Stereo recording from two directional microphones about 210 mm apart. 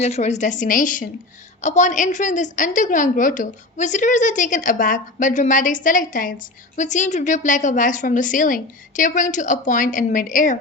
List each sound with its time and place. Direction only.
0.0 s a woman's voice: 30° left (ahead or behind)